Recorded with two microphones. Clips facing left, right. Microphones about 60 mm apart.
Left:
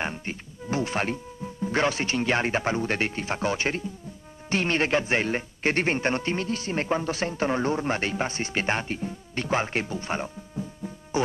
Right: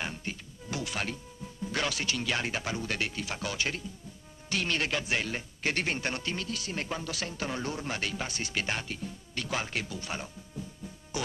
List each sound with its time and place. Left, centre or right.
0.0 s a man's voice: left
11.2 s music: left